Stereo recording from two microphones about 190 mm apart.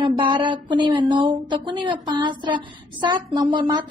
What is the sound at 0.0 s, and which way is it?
A woman's voice, 25° right (ahead or behind).